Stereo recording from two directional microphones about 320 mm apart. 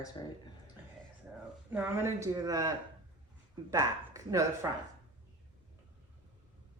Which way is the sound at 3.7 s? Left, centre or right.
Centre.